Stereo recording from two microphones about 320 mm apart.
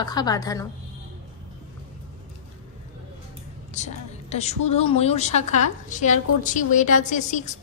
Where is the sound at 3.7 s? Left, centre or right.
Left.